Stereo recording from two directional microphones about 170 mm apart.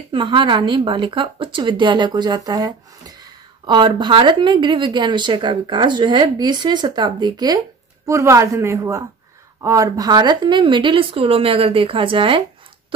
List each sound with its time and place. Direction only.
0.1 s speech: 30° right (ahead or behind)